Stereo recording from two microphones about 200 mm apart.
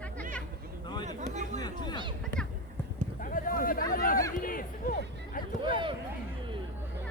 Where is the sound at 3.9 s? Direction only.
45° left (ahead or behind).